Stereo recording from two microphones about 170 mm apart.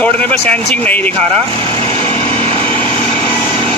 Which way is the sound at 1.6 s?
35° right (ahead or behind).